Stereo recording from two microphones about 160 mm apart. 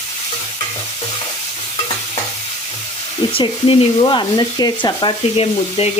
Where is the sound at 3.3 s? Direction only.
35° left (ahead or behind).